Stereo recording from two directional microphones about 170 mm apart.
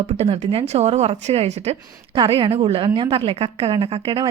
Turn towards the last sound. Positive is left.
turn(degrees=-30)  # may be behind; listen again after turning